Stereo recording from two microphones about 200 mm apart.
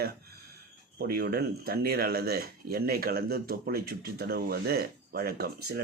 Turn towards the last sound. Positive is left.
turn(degrees=-50)  # may be behind; listen again after turning